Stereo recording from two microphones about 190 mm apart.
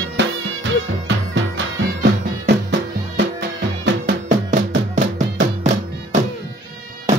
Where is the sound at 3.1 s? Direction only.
65° right (ahead or behind).